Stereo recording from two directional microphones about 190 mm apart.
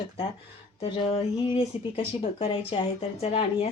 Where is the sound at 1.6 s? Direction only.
30° left (ahead or behind).